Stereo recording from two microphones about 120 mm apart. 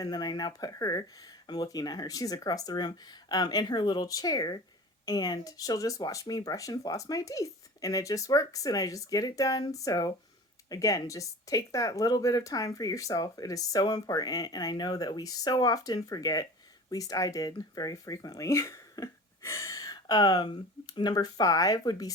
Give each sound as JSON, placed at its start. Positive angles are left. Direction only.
{"t": 0.0, "sound": "speech", "side_deg": 35}